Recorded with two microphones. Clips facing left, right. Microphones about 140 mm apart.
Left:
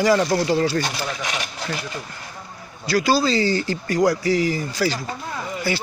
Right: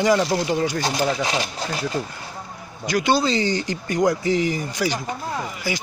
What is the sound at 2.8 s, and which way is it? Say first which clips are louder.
Speech: left 1 dB; 20° right (ahead or behind).